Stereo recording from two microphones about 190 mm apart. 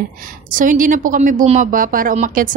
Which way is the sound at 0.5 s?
45° right (ahead or behind).